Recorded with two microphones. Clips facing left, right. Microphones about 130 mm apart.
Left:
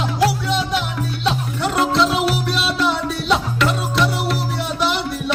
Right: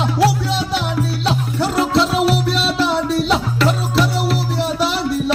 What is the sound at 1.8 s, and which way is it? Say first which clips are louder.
Music: right 1 dB; centre (ahead or behind).